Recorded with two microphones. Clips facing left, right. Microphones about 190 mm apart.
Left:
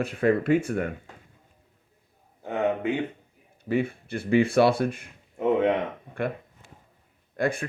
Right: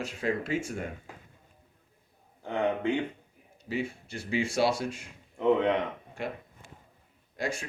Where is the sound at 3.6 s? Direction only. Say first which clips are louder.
Left 7 dB; 55° left (ahead or behind).